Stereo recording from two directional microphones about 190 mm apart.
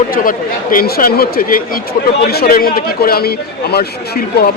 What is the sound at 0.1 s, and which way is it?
Speech, 50° left (ahead or behind).